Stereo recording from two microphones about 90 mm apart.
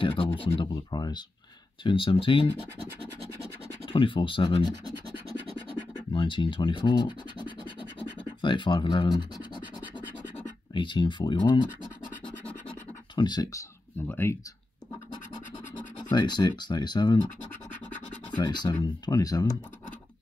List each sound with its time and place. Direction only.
0.0 s speech: 75° left (ahead or behind)
0.9 s speech: 50° left (ahead or behind)
1.8 s speech: 70° left (ahead or behind)
3.8 s speech: 75° left (ahead or behind)
6.1 s speech: 70° left (ahead or behind)
10.7 s speech: 65° left (ahead or behind)
14.0 s speech: 20° left (ahead or behind)
15.7 s speech: 55° left (ahead or behind)
18.4 s speech: 55° left (ahead or behind)